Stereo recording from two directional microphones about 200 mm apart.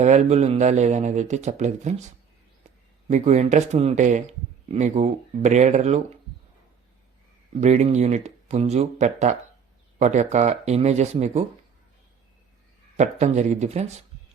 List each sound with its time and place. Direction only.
0.0 s a man's voice: 35° right (ahead or behind)
3.1 s a man's voice: 35° right (ahead or behind)
7.6 s a man's voice: 35° right (ahead or behind)
13.0 s a man's voice: 35° right (ahead or behind)